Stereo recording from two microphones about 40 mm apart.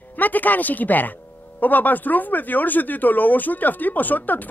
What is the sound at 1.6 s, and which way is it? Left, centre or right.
Speech, left.